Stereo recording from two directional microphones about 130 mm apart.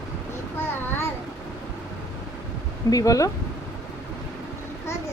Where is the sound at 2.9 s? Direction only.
25° left (ahead or behind).